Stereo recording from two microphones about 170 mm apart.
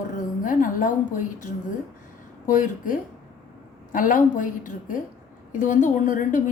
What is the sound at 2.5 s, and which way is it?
A woman's voice, 50° left (ahead or behind).